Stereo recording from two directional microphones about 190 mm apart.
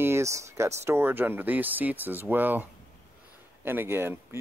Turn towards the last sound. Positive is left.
turn(degrees=-10)  # may be behind; listen again after turning